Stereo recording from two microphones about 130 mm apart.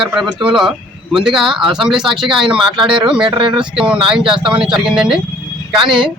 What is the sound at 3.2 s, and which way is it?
Speech, 40° right (ahead or behind).